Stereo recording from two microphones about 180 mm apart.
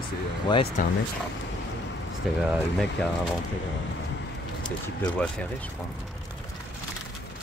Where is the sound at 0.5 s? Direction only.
25° left (ahead or behind).